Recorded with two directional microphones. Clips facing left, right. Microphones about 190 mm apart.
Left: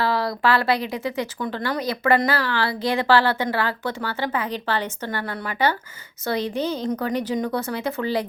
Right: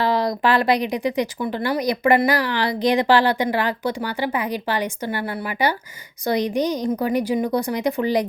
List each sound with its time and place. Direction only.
0.0 s speech: 20° right (ahead or behind)